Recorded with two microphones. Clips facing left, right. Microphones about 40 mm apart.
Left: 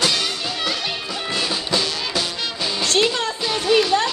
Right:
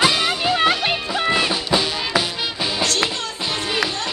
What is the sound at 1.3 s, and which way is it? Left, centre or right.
Music, right.